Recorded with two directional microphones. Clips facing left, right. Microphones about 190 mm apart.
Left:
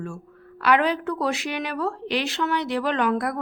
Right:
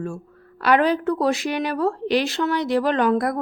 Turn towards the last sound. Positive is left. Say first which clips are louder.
# right 4 dB
turn(degrees=-40)  # may be behind; listen again after turning